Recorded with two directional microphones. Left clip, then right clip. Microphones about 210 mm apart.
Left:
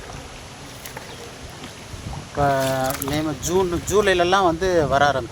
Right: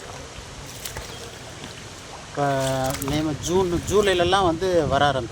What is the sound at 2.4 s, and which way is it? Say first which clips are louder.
Speech: left 3 dB; 20° left (ahead or behind).